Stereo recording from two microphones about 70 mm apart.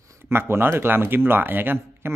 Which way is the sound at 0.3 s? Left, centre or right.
Right.